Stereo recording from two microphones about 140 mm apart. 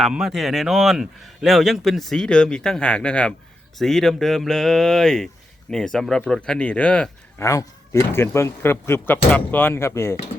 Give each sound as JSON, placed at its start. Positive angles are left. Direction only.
{"t": 0.0, "sound": "speech", "side_deg": 0}
{"t": 7.4, "sound": "speech", "side_deg": 20}